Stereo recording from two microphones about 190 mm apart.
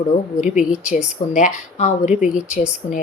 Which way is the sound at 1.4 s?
40° left (ahead or behind).